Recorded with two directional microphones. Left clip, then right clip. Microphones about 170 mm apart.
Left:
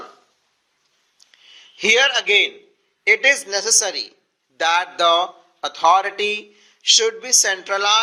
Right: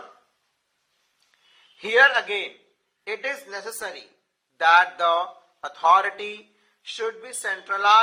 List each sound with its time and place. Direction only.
1.8 s speech: 45° left (ahead or behind)